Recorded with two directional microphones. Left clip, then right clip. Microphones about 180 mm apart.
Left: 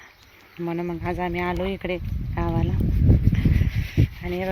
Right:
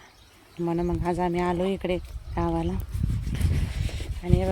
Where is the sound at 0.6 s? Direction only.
10° right (ahead or behind).